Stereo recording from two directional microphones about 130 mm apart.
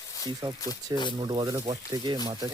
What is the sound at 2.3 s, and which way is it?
Cutlery, 25° right (ahead or behind).